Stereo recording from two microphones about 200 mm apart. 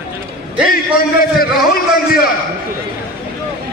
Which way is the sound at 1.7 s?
45° left (ahead or behind).